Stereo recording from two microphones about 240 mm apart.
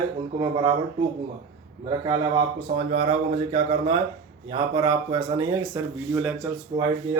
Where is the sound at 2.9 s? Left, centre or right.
Right.